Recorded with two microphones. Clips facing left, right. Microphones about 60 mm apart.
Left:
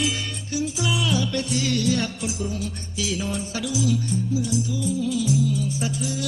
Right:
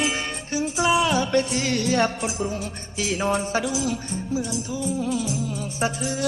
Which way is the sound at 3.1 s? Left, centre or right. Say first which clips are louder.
Right 6 dB; right.